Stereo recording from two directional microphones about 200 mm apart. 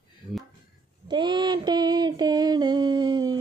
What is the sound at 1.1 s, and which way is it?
Child singing, 20° right (ahead or behind).